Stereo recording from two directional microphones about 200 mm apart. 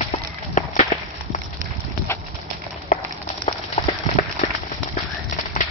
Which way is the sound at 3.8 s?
30° left (ahead or behind).